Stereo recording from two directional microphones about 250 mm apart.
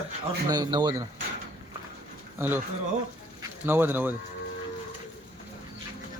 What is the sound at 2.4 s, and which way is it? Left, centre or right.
Speech, centre.